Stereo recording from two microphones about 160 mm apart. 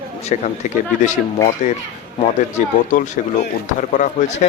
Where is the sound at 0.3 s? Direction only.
45° left (ahead or behind).